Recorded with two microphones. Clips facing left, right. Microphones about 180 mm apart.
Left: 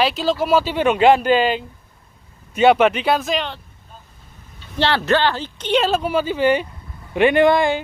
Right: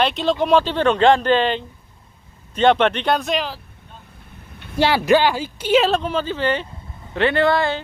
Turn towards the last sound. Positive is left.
turn(degrees=15)  # may be behind; listen again after turning